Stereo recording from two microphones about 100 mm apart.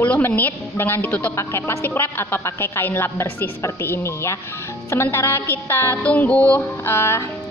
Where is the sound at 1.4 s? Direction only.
25° left (ahead or behind).